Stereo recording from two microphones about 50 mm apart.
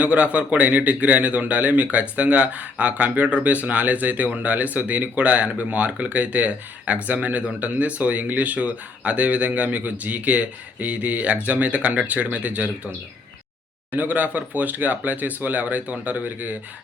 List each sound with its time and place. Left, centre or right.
0.0 s speech: right
13.9 s speech: right